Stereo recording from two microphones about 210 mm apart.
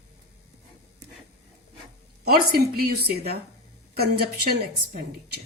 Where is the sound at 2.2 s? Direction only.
45° right (ahead or behind).